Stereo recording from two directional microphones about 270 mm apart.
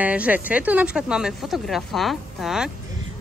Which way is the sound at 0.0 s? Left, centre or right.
Centre.